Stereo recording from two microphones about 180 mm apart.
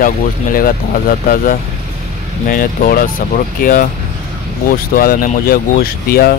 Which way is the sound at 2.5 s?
50° left (ahead or behind).